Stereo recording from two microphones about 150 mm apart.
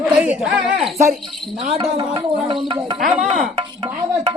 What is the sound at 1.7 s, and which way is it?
Speech, 35° right (ahead or behind).